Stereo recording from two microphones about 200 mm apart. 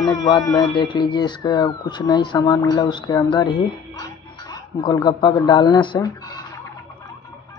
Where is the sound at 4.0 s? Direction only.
20° left (ahead or behind).